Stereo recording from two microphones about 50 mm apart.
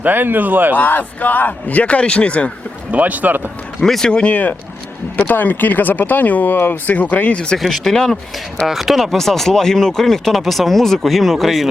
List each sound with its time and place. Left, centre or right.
0.0 s speech: right
0.8 s speech: left
2.9 s speech: right
3.8 s speech: centre
4.1 s speech: left
7.6 s speech: centre
8.6 s speech: centre